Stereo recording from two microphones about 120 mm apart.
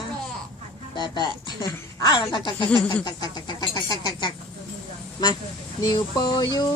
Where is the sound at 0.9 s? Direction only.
40° left (ahead or behind).